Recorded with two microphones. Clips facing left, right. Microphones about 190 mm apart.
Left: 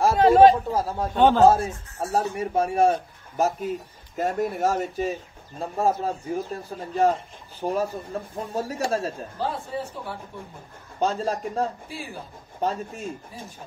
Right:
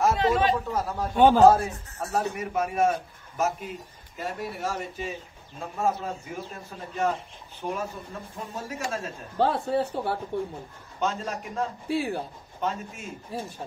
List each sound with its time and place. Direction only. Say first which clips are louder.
0.2 s speech: left 9 dB; 40° left (ahead or behind)
1.1 s a man's voice: even; 10° right (ahead or behind)
1.5 s a man's voice: left 1 dB; 25° left (ahead or behind)
4.2 s speech: left 8 dB; 45° left (ahead or behind)
9.4 s speech: right 6 dB; 65° right (ahead or behind)
11.0 s speech: left 5 dB; 35° left (ahead or behind)
11.9 s speech: right 10 dB; 65° right (ahead or behind)
12.5 s speech: left 4 dB; 35° left (ahead or behind)